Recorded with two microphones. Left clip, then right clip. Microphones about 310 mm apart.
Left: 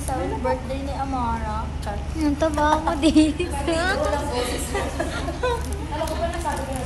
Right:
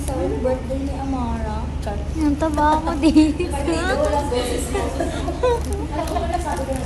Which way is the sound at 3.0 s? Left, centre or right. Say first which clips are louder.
Right 4 dB; left.